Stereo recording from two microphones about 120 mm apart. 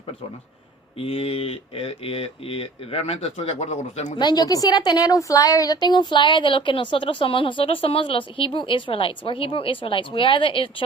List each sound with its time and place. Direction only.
0.9 s a woman's voice: 50° left (ahead or behind); by 4.1 s 75° left (ahead or behind)
4.2 s a woman's voice: 35° left (ahead or behind)